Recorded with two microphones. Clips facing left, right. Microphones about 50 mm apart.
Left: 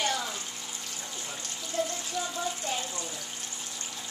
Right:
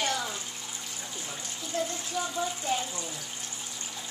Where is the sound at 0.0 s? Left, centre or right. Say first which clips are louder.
Even; centre.